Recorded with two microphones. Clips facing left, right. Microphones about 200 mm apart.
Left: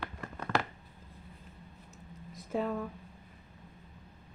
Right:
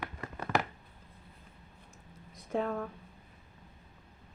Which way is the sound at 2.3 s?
5° left (ahead or behind).